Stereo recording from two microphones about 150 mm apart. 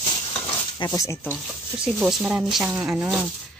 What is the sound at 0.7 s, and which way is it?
Speech, 25° left (ahead or behind).